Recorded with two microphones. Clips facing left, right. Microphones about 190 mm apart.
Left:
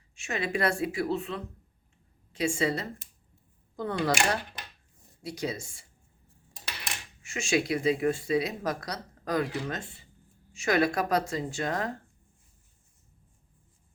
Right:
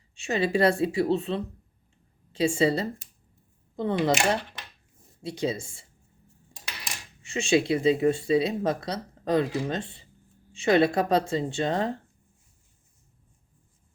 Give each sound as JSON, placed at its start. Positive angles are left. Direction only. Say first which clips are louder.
{"t": 0.3, "sound": "a woman's voice", "louder": "right 6 dB", "side_deg": -30}
{"t": 7.2, "sound": "speech", "louder": "right 5 dB", "side_deg": -30}